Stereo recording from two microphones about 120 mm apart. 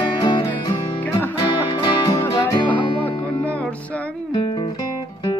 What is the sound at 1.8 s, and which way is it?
Music, 40° left (ahead or behind).